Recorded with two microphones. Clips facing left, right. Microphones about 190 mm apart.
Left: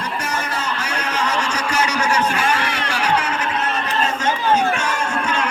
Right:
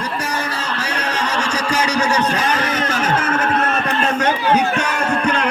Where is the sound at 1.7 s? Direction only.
35° right (ahead or behind).